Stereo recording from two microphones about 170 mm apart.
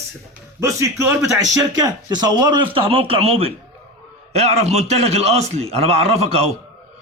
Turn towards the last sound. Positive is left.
turn(degrees=-35)  # may be behind; listen again after turning